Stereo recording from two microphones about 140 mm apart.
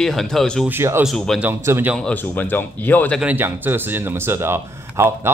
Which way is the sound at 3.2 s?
10° right (ahead or behind).